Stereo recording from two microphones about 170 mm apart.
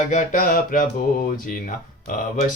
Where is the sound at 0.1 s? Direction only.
50° left (ahead or behind).